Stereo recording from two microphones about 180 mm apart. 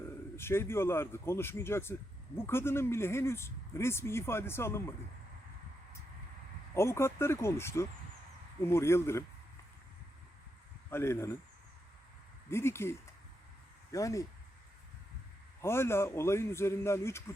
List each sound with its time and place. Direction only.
0.0 s speech: 15° left (ahead or behind)
6.7 s speech: 15° left (ahead or behind)
10.9 s speech: 15° left (ahead or behind)
12.5 s speech: 15° left (ahead or behind)
15.6 s speech: 15° left (ahead or behind)